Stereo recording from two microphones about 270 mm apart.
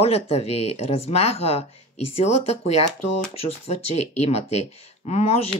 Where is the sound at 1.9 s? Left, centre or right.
Left.